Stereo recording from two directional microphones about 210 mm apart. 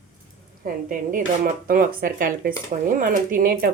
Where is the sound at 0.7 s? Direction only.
45° right (ahead or behind).